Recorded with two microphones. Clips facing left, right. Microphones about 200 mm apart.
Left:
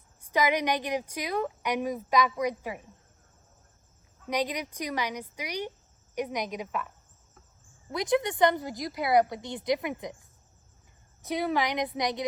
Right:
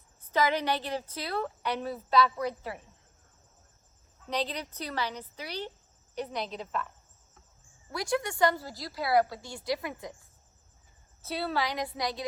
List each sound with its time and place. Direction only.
0.2 s a woman's voice: 15° left (ahead or behind)
4.3 s a woman's voice: 15° left (ahead or behind)
11.2 s a woman's voice: 15° left (ahead or behind)